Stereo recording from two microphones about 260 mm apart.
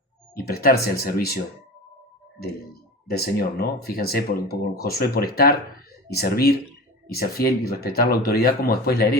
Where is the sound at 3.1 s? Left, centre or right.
Left.